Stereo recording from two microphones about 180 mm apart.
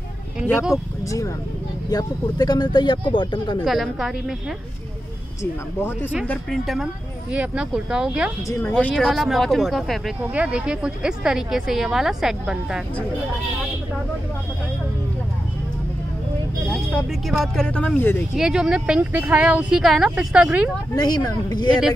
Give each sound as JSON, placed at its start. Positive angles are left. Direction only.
{"t": 1.0, "sound": "speech", "side_deg": 20}
{"t": 3.6, "sound": "speech", "side_deg": 0}
{"t": 5.4, "sound": "speech", "side_deg": 10}
{"t": 8.5, "sound": "speech", "side_deg": 10}
{"t": 16.7, "sound": "speech", "side_deg": 0}
{"t": 18.3, "sound": "speech", "side_deg": -5}
{"t": 20.9, "sound": "speech", "side_deg": 20}